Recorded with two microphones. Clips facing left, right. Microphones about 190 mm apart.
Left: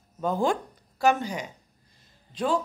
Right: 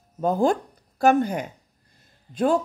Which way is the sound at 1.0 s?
55° right (ahead or behind).